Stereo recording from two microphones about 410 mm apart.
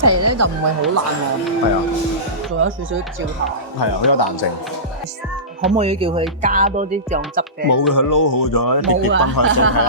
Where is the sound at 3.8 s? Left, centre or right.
Left.